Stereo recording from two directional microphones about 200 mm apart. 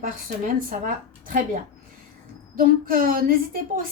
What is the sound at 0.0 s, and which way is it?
Speech, 45° right (ahead or behind).